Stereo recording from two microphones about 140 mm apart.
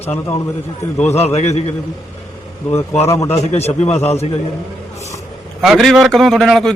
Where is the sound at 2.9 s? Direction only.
20° left (ahead or behind).